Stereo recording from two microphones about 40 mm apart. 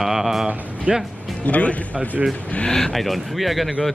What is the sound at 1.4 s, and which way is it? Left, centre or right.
Speech, left.